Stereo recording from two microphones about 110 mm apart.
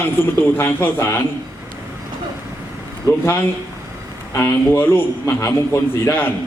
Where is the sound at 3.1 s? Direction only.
30° left (ahead or behind).